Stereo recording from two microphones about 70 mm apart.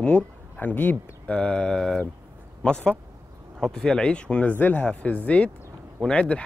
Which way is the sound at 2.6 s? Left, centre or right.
Centre.